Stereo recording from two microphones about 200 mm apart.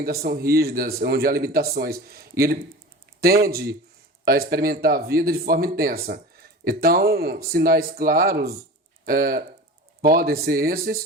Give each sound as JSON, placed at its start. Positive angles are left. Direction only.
{"t": 0.0, "sound": "speech", "side_deg": -50}